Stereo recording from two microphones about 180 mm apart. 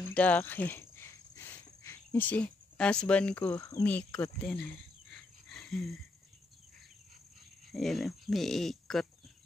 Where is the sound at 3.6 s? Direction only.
15° left (ahead or behind).